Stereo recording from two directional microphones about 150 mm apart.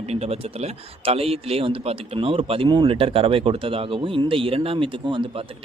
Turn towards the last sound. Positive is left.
turn(degrees=-35)  # may be behind; listen again after turning